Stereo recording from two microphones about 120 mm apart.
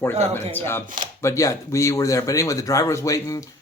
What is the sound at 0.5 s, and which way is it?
Speech, 20° left (ahead or behind).